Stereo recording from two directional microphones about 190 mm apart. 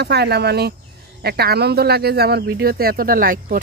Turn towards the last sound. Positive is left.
turn(degrees=-50)  # may be behind; listen again after turning